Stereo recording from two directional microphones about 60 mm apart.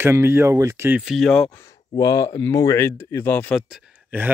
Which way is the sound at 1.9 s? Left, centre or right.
Left.